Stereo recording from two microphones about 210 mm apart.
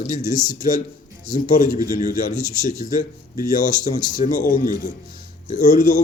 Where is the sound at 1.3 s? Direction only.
35° left (ahead or behind).